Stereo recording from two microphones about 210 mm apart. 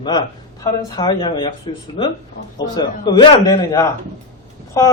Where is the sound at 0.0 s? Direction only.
20° left (ahead or behind).